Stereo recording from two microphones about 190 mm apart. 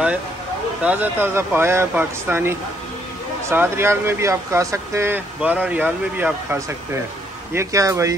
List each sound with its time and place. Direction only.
0.8 s speech: 10° right (ahead or behind)